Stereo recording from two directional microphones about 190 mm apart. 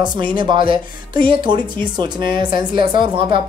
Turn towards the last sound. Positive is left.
turn(degrees=-25)  # may be behind; listen again after turning